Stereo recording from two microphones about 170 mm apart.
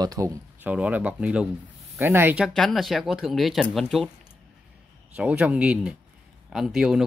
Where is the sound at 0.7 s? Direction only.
5° right (ahead or behind).